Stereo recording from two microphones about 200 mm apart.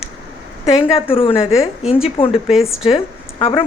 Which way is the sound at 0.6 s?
25° left (ahead or behind).